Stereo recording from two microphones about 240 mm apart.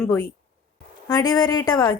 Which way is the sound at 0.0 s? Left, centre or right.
Centre.